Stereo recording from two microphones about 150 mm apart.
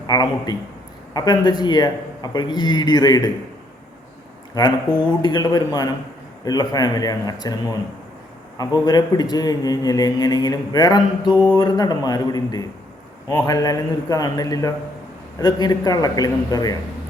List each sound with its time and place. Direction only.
0.1 s a man's voice: 25° left (ahead or behind)
5.2 s a man's voice: 25° left (ahead or behind)